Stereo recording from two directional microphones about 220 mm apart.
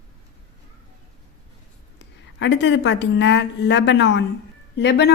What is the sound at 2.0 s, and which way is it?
A woman's voice, 55° left (ahead or behind).